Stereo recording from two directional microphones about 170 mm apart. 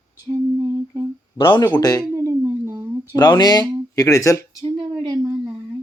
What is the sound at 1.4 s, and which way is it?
Speech, 25° left (ahead or behind).